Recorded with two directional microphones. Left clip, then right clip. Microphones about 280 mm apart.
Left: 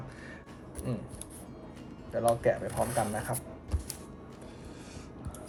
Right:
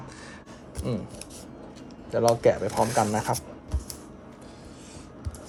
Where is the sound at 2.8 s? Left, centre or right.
Right.